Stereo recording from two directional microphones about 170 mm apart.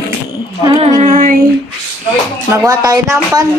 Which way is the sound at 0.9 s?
45° right (ahead or behind).